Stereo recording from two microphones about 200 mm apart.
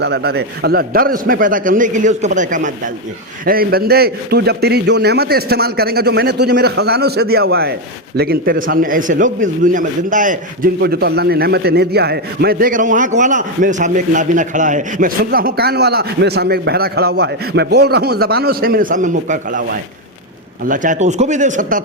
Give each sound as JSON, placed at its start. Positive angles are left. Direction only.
{"t": 0.0, "sound": "a man's voice", "side_deg": -55}
{"t": 10.8, "sound": "a man's voice", "side_deg": -50}
{"t": 20.7, "sound": "speech", "side_deg": -40}